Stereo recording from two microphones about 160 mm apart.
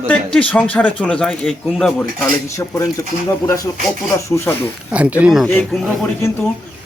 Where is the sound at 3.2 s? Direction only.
20° left (ahead or behind).